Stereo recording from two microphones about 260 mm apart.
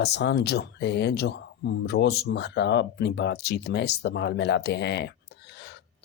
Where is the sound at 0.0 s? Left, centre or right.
Left.